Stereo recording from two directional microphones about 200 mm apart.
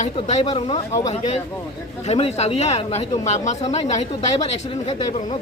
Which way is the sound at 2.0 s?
30° left (ahead or behind).